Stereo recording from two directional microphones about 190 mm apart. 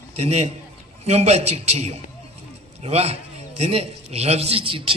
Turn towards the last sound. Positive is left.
turn(degrees=-30)  # may be behind; listen again after turning